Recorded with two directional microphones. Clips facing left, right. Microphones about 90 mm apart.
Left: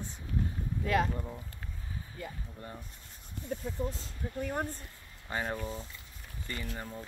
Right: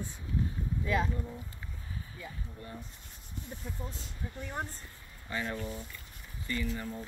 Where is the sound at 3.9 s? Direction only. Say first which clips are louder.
Left 4 dB; 40° left (ahead or behind).